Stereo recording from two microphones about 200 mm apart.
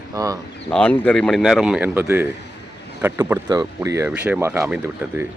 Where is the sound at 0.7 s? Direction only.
5° left (ahead or behind).